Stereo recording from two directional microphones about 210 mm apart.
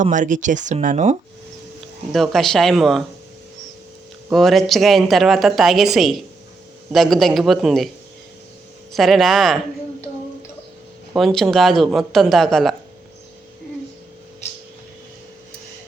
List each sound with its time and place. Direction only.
0.0 s speech: 35° right (ahead or behind)
2.1 s a woman's voice: centre (ahead or behind)
4.3 s a woman's voice: centre (ahead or behind)
8.9 s a woman's voice: centre (ahead or behind)
11.1 s a woman's voice: centre (ahead or behind)